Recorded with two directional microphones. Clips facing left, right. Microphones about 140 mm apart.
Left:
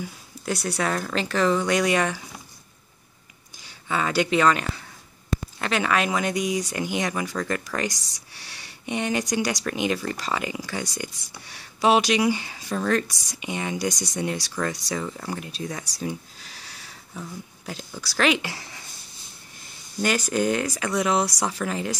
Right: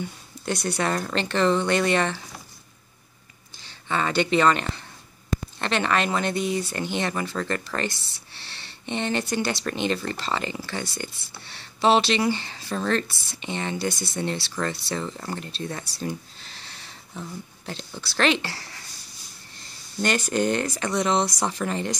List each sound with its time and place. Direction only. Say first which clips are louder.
0.0 s speech: right 1 dB; 10° left (ahead or behind)
3.6 s speech: even; 5° left (ahead or behind)
18.5 s speech: left 1 dB; 15° left (ahead or behind)
20.0 s speech: even; 10° left (ahead or behind)